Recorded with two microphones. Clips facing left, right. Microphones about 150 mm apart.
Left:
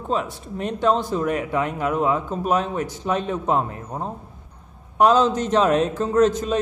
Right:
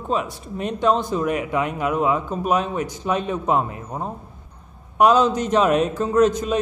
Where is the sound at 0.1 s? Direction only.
15° right (ahead or behind).